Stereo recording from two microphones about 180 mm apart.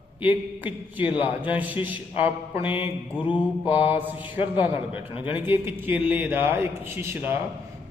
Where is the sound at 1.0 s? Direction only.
30° left (ahead or behind).